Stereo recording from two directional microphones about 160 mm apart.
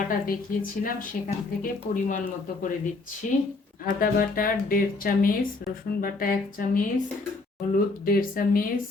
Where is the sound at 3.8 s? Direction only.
60° left (ahead or behind).